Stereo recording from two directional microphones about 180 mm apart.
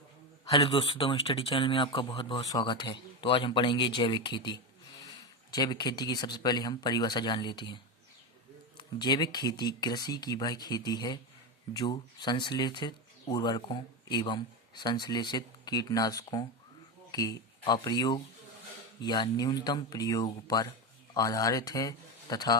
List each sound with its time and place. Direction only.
0.4 s speech: 30° left (ahead or behind)
8.8 s speech: 25° left (ahead or behind)